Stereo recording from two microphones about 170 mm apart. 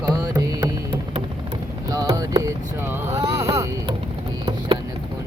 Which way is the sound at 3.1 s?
35° right (ahead or behind).